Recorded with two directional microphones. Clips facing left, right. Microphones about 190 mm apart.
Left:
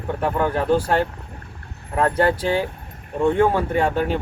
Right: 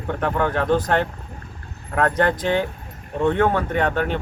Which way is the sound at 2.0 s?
10° left (ahead or behind).